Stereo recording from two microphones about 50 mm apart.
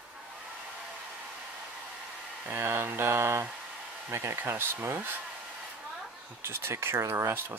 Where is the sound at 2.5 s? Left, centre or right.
Right.